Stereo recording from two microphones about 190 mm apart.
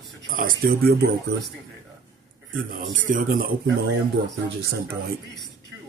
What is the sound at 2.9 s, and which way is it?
Speech, 45° right (ahead or behind).